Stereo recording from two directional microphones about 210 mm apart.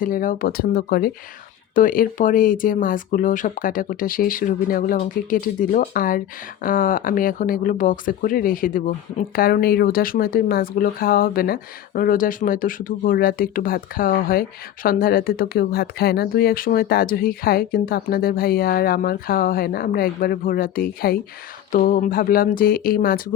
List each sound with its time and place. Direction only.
0.0 s speech: 40° left (ahead or behind)